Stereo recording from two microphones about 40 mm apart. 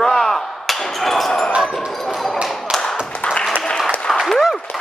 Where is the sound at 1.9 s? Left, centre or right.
Centre.